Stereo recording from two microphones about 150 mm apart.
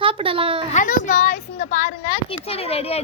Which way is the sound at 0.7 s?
60° left (ahead or behind).